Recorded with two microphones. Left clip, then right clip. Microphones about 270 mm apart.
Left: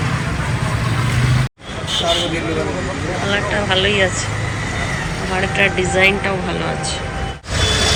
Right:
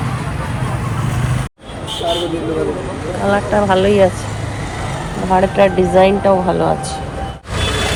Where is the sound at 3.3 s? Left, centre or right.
Centre.